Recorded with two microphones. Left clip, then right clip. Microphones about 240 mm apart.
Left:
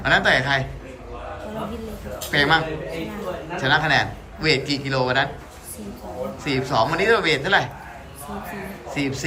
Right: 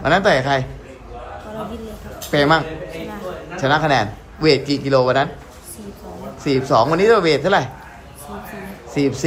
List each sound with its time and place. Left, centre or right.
0.0 s a man's voice: right
2.3 s a man's voice: right
6.4 s a man's voice: right
8.9 s a man's voice: right